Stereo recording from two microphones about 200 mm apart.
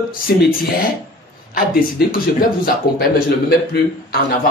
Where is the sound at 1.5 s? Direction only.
45° left (ahead or behind).